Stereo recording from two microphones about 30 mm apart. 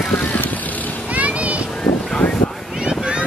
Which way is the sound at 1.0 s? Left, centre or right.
Right.